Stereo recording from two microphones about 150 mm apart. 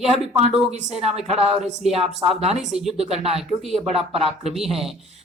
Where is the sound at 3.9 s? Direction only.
40° right (ahead or behind).